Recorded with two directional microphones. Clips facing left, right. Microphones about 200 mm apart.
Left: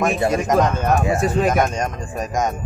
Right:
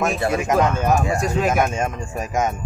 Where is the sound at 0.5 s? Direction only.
5° right (ahead or behind).